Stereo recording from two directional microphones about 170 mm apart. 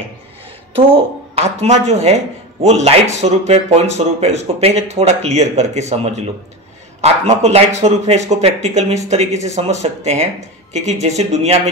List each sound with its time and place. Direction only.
0.7 s speech: 35° right (ahead or behind)